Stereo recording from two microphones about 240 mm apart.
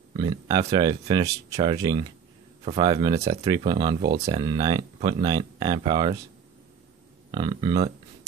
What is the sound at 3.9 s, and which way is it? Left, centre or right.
Speech, right.